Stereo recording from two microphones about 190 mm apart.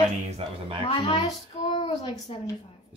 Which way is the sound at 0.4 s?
30° right (ahead or behind).